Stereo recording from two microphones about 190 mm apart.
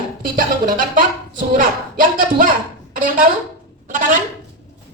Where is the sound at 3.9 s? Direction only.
45° right (ahead or behind).